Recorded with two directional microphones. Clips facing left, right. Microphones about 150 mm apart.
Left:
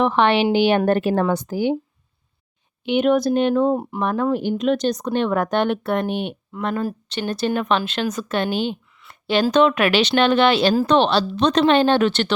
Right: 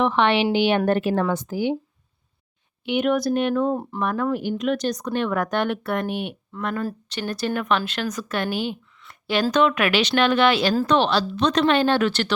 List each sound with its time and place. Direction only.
0.0 s a woman's voice: 40° left (ahead or behind)
2.8 s speech: 25° left (ahead or behind)